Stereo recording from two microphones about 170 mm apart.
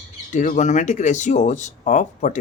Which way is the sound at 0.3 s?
45° left (ahead or behind).